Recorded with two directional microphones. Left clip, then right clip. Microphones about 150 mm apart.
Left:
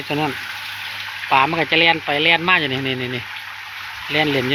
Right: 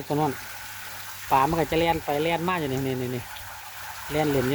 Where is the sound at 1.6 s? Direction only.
20° right (ahead or behind).